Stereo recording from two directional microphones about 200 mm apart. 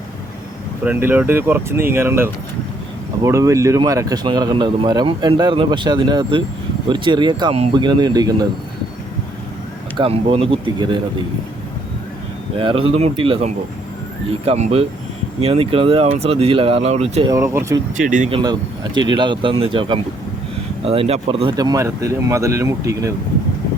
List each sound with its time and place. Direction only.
0.9 s speech: 10° right (ahead or behind)
10.0 s speech: 25° right (ahead or behind)
12.5 s speech: 25° right (ahead or behind)
17.3 s speech: 10° right (ahead or behind)
17.9 s speech: 40° right (ahead or behind)
18.3 s speech: 25° right (ahead or behind)